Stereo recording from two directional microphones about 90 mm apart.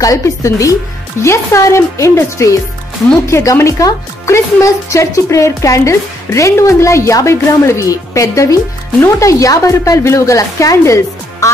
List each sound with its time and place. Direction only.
0.0 s speech: 40° left (ahead or behind)